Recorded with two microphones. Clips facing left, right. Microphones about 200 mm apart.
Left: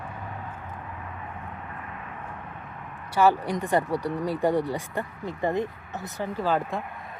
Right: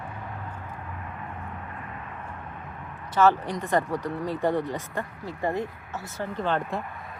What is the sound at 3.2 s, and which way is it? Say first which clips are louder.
Speech: even; 15° left (ahead or behind).